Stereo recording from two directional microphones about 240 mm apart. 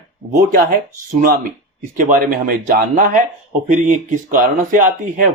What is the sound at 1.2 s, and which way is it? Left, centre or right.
Speech, right.